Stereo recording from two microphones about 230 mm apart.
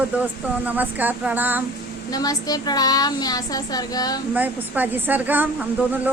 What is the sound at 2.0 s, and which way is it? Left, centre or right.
A woman's voice, centre.